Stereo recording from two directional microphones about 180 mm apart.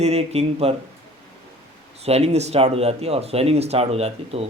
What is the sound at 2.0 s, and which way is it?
Speech, 35° right (ahead or behind).